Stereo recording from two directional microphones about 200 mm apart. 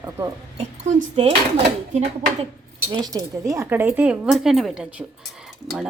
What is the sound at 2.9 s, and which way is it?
Speech, 20° right (ahead or behind).